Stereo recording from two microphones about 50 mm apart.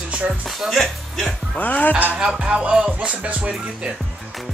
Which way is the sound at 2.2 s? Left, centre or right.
Centre.